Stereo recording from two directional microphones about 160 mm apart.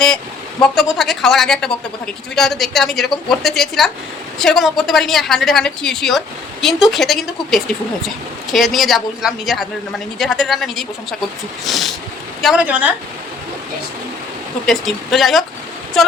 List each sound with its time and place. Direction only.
0.6 s a woman's voice: centre (ahead or behind)
14.7 s a woman's voice: centre (ahead or behind)